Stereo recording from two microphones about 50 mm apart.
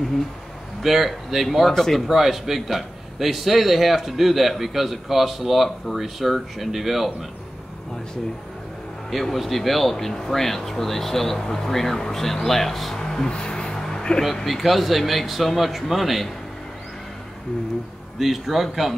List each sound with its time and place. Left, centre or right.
0.8 s a man's voice: centre
9.1 s a man's voice: centre
13.3 s a sound: centre
14.3 s a man's voice: centre
18.2 s a man's voice: centre